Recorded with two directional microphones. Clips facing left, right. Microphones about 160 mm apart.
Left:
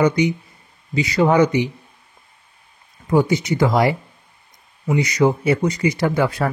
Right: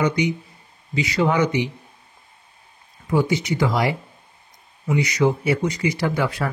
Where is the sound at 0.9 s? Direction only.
40° left (ahead or behind).